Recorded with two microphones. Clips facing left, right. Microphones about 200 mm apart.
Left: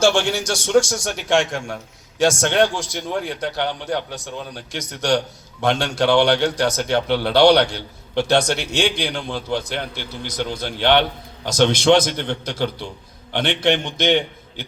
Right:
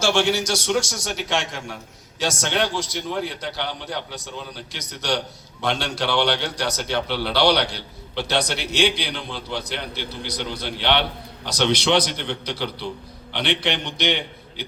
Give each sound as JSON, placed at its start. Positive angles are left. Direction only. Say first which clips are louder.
{"t": 0.0, "sound": "a man's voice", "louder": "left 3 dB", "side_deg": 50}